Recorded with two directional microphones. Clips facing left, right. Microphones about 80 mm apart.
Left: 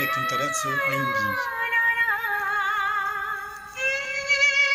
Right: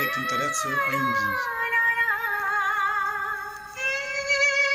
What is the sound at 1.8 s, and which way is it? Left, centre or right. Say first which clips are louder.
Music: left 1 dB; centre.